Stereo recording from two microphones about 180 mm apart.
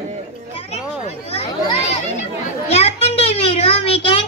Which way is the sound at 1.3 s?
35° left (ahead or behind).